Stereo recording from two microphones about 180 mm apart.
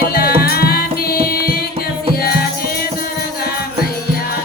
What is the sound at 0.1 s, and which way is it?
Music, 55° left (ahead or behind).